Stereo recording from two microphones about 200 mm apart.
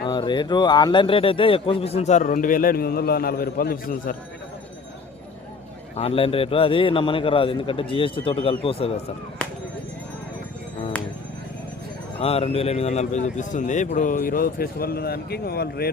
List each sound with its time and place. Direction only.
0.0 s speech: 20° left (ahead or behind); by 4.1 s 45° left (ahead or behind)
6.0 s a man's voice: 30° left (ahead or behind)
12.2 s speech: 30° left (ahead or behind); by 15.9 s 50° left (ahead or behind)